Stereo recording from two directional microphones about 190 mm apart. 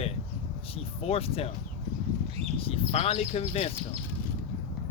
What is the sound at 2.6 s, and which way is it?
Speech, 30° left (ahead or behind).